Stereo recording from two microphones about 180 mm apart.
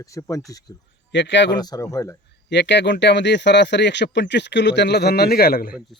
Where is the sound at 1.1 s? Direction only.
80° left.